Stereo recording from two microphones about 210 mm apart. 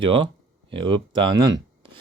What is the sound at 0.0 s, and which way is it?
Speech, 25° right (ahead or behind).